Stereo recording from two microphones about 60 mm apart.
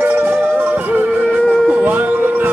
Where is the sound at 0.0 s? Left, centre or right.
Right.